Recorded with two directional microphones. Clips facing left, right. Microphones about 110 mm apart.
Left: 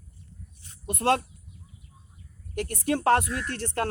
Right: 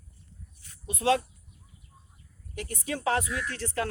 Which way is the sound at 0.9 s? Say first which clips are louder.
Left 1 dB; 60° left (ahead or behind).